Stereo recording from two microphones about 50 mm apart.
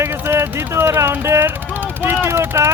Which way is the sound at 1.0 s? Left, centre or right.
Right.